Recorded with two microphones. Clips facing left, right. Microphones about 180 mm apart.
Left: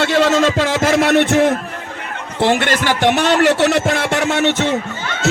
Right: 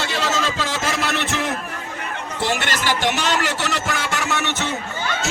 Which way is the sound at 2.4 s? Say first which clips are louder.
Left 8 dB; 55° left (ahead or behind).